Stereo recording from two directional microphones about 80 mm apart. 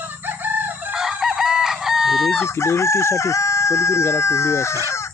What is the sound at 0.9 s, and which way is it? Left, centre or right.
Chicken, centre.